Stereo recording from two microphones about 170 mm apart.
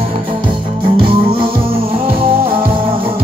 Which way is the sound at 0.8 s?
30° right (ahead or behind).